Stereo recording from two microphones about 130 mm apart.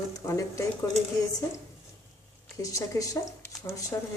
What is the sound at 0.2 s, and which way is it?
Speech, 25° left (ahead or behind).